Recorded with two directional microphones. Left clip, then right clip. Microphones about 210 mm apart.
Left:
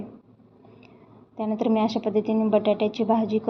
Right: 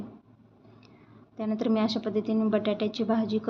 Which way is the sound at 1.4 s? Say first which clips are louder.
Left 4 dB; 5° left (ahead or behind).